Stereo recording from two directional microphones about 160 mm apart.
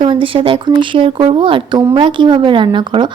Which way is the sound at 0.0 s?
30° right (ahead or behind).